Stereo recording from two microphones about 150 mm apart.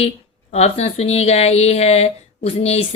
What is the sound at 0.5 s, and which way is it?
Speech, 45° left (ahead or behind).